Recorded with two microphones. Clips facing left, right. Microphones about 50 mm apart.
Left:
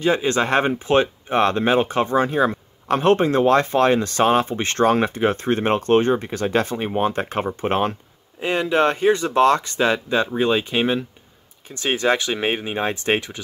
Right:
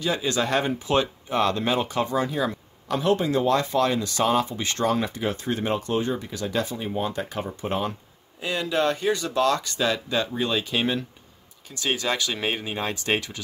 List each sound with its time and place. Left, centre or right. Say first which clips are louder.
0.0 s speech: left 6 dB; left
8.4 s speech: left 6 dB; left